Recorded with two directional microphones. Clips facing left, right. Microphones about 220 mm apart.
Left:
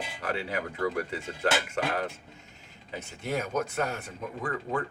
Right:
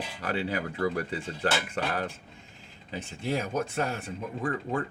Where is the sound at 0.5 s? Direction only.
30° right (ahead or behind).